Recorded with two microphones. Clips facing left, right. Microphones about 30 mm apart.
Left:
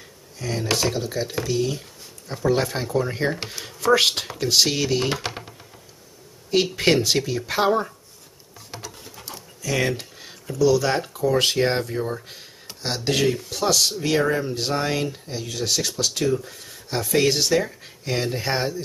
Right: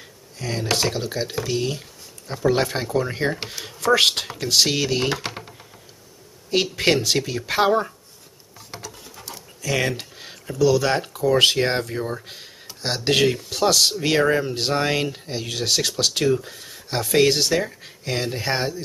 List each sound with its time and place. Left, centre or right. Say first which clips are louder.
0.4 s speech: even; centre
6.5 s speech: left 1 dB; centre
7.2 s speech: right 1 dB; centre
8.5 s a sound: even; centre
9.6 s a sound: even; centre
10.7 s speech: right 1 dB; centre
13.0 s speech: right 3 dB; right
16.4 s speech: right 1 dB; right
17.3 s speech: even; centre